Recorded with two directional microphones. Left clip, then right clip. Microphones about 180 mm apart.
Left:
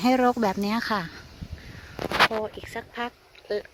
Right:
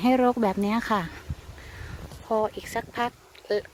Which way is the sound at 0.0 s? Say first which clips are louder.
Even; centre (ahead or behind).